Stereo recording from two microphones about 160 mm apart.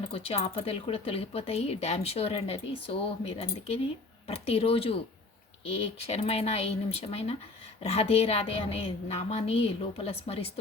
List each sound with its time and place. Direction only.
0.1 s speech: 40° left (ahead or behind)